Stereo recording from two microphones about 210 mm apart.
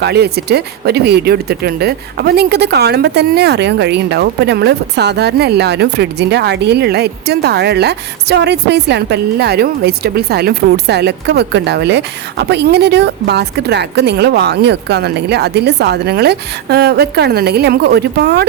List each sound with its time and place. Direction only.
0.0 s speech: 50° right (ahead or behind)